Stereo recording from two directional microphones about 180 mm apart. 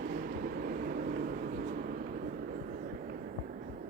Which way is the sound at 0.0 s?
55° right (ahead or behind).